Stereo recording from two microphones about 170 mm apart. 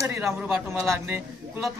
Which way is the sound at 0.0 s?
15° right (ahead or behind).